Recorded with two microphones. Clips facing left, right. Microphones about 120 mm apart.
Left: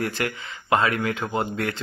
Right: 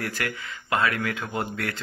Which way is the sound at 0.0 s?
20° left (ahead or behind).